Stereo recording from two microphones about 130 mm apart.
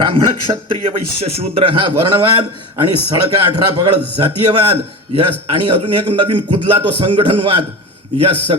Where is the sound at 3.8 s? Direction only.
45° right (ahead or behind).